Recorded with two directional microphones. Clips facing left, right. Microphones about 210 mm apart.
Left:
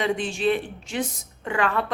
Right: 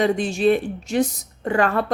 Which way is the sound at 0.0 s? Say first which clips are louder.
Right 5 dB; 40° right (ahead or behind).